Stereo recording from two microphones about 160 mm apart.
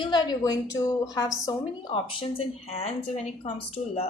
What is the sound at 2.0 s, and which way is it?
A woman's voice, 35° left (ahead or behind).